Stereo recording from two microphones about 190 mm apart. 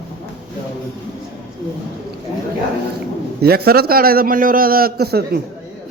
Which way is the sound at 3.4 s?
55° right (ahead or behind).